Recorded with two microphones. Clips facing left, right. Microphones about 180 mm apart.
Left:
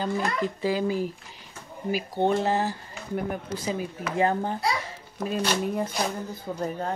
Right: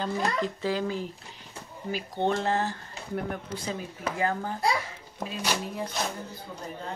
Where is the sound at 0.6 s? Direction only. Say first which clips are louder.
Left 4 dB; 10° left (ahead or behind).